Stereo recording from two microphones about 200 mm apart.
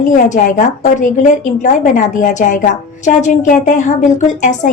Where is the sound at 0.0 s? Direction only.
40° left (ahead or behind).